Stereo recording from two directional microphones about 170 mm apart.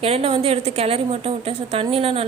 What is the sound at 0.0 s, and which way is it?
A woman's voice, 35° right (ahead or behind).